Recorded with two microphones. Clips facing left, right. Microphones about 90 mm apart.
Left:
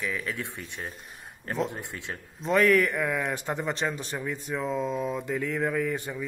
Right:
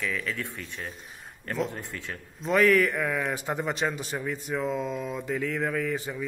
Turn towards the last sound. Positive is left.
turn(degrees=0)  # may be behind; listen again after turning